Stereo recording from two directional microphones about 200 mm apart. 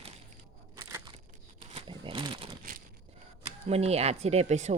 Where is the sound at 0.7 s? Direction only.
15° right (ahead or behind).